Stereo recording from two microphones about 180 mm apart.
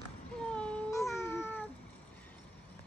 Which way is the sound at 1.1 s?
15° left (ahead or behind).